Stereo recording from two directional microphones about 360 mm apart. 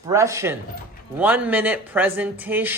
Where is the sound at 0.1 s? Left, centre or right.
Centre.